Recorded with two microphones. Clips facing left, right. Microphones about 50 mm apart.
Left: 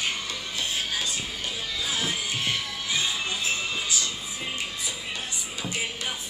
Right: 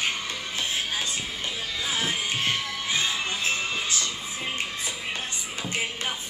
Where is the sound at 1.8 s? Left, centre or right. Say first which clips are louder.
Right 2 dB; right.